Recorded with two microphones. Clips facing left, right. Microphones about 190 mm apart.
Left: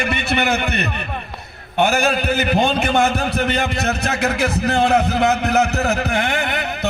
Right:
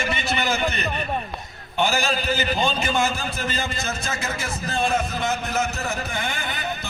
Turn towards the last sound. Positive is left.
turn(degrees=70)  # may be behind; listen again after turning